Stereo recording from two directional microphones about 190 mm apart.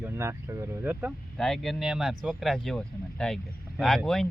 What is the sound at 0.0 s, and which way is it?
Speech, 15° right (ahead or behind).